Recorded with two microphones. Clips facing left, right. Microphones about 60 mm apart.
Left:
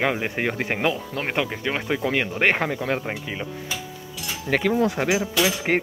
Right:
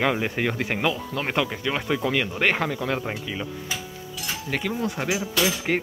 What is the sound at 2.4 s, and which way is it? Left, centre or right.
Speech, left.